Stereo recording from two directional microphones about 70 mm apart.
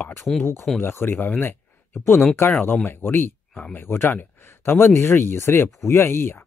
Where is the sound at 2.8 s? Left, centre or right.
Left.